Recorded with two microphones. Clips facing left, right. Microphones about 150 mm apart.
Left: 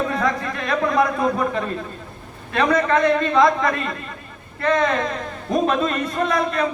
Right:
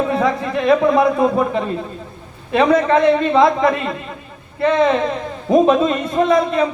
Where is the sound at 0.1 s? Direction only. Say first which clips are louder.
Right 5 dB; 10° right (ahead or behind).